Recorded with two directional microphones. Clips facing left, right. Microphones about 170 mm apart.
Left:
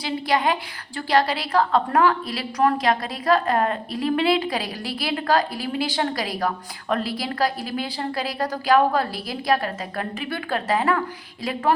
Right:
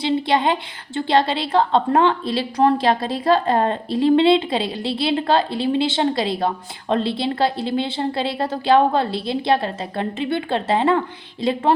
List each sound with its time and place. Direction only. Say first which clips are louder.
0.0 s a woman's voice: right 4 dB; 25° right (ahead or behind)